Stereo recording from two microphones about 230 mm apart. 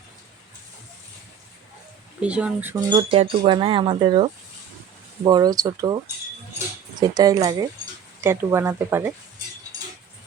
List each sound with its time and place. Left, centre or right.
2.2 s speech: centre
2.9 s speech: right
7.0 s speech: centre